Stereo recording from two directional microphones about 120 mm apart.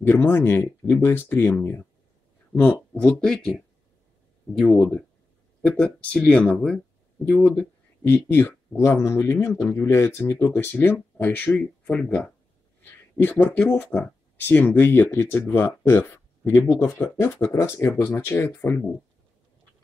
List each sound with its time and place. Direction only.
0.0 s speech: 20° left (ahead or behind)
4.7 s speech: 10° left (ahead or behind)
12.8 s a sound: 20° left (ahead or behind)
13.6 s speech: 10° left (ahead or behind)